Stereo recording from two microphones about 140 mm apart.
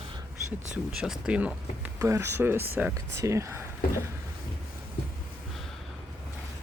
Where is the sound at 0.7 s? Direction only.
5° right (ahead or behind).